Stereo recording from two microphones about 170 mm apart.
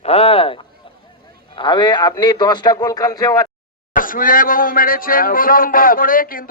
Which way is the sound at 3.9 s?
55° left (ahead or behind).